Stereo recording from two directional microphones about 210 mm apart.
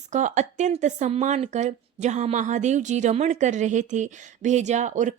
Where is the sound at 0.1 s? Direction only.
35° right (ahead or behind).